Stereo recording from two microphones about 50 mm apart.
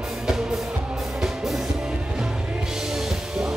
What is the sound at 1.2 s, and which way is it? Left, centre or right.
Music, centre.